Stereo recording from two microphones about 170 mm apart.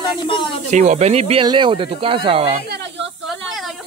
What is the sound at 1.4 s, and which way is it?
Speech, 25° right (ahead or behind).